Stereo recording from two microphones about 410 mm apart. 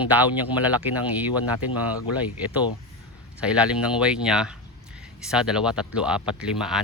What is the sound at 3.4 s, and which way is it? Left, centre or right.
Speech, centre.